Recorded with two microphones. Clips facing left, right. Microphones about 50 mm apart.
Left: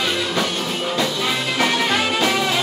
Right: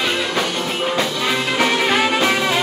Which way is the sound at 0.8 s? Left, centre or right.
Right.